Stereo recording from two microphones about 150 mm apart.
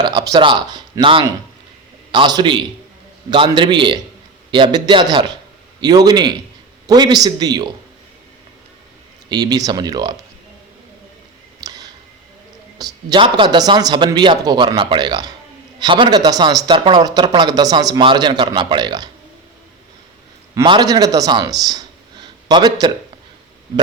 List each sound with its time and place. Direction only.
0.0 s a man's voice: 30° right (ahead or behind)
9.3 s speech: 25° right (ahead or behind)
11.6 s a sound: 25° right (ahead or behind)
12.8 s speech: 30° right (ahead or behind)
20.7 s a man's voice: 25° right (ahead or behind)